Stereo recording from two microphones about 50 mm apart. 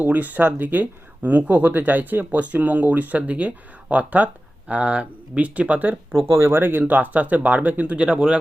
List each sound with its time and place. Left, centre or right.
0.0 s speech: right
6.3 s speech: right
6.8 s speech: right